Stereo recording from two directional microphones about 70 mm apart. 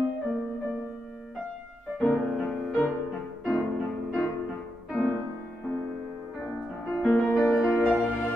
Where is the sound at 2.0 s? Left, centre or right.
Centre.